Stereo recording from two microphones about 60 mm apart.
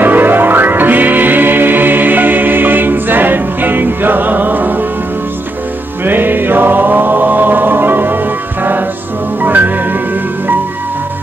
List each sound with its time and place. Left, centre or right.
0.0 s music: right
6.0 s music: right
9.4 s music: right